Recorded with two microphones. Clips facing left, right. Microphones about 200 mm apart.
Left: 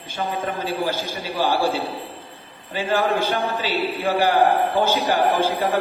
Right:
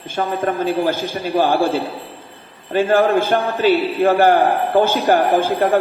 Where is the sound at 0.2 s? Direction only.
50° right (ahead or behind).